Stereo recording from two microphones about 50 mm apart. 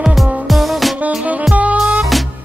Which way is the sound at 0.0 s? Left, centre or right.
Centre.